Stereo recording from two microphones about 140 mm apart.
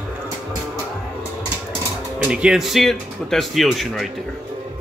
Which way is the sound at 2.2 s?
5° right (ahead or behind).